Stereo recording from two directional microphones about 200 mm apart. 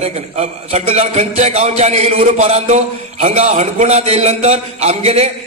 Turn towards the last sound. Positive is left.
turn(degrees=-30)  # may be behind; listen again after turning